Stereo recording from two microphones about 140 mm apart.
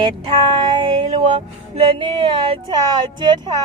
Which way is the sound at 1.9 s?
35° right (ahead or behind).